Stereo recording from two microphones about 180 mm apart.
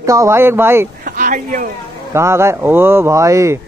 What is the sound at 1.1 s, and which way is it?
Speech, 45° right (ahead or behind).